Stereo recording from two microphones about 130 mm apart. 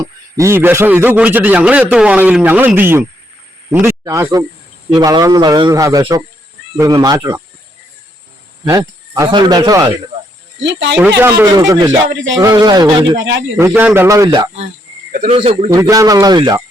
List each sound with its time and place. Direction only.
0.0 s a man's voice: 25° right (ahead or behind)
8.6 s speech: 30° right (ahead or behind)
10.9 s a man's voice: 15° right (ahead or behind)
11.4 s a man's voice: 30° right (ahead or behind)
13.6 s a man's voice: 20° right (ahead or behind)
15.3 s speech: 45° right (ahead or behind)
15.7 s a man's voice: 25° right (ahead or behind)